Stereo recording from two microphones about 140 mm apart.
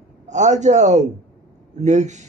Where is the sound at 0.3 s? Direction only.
60° right (ahead or behind).